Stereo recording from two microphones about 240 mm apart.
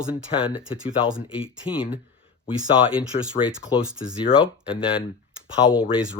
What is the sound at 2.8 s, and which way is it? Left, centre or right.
Speech, left.